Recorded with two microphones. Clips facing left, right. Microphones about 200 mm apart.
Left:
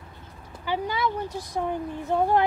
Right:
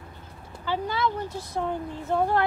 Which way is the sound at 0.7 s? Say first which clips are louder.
Even; 15° left (ahead or behind).